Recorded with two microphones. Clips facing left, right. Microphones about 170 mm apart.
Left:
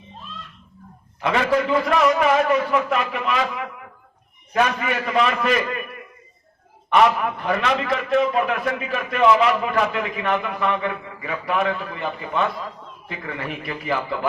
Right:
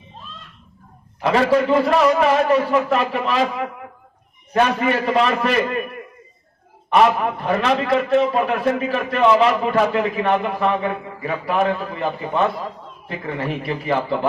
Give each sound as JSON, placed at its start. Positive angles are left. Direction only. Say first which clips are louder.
{"t": 1.2, "sound": "a man's voice", "louder": "right 4 dB", "side_deg": -30}
{"t": 6.9, "sound": "a man's voice", "louder": "right 2 dB", "side_deg": -30}